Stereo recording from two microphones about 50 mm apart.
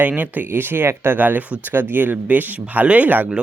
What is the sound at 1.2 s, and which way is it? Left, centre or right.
Speech, right.